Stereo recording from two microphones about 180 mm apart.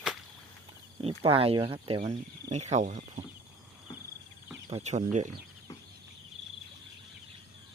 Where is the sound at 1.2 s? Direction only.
30° right (ahead or behind).